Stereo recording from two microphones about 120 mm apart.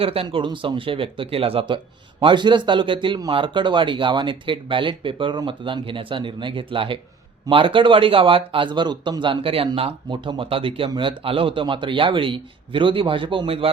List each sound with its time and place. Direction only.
0.0 s speech: 50° right (ahead or behind)